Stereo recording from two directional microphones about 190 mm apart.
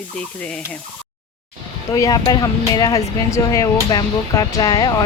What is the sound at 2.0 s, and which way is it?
Speech, 20° left (ahead or behind).